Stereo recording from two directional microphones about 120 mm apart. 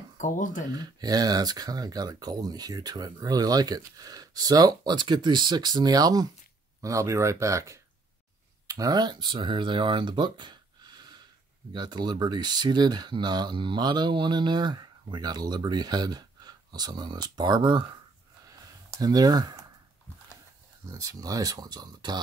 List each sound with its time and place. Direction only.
0.2 s speech: 90° left
0.7 s speech: 35° right (ahead or behind)
18.9 s speech: 30° right (ahead or behind)
20.8 s speech: 30° right (ahead or behind)